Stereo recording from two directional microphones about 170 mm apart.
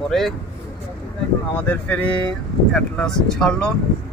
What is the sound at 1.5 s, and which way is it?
Speech, 10° left (ahead or behind).